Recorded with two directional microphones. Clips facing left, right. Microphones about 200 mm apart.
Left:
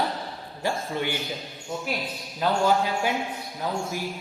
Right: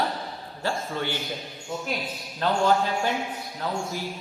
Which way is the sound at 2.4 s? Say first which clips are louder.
Even; 10° left (ahead or behind).